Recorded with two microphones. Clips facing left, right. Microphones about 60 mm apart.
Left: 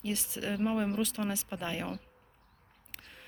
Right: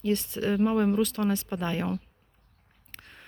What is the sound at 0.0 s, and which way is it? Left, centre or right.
Speech, centre.